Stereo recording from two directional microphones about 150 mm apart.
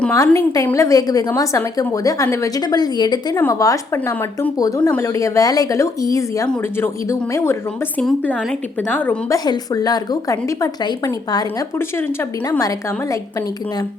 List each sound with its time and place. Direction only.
0.1 s a woman's voice: 20° left (ahead or behind)
4.8 s speech: 10° left (ahead or behind)
5.0 s a woman's voice: 20° left (ahead or behind)
9.4 s a woman's voice: 25° left (ahead or behind)
12.5 s a woman's voice: 25° left (ahead or behind)